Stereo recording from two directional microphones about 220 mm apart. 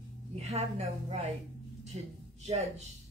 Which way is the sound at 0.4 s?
30° right (ahead or behind).